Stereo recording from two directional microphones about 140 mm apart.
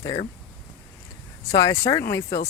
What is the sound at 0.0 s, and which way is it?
Speech, 25° left (ahead or behind).